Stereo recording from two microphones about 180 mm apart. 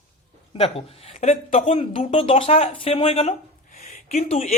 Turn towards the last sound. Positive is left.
turn(degrees=35)  # may be behind; listen again after turning